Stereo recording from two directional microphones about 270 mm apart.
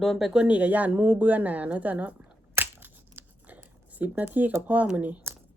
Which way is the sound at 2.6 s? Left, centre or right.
Centre.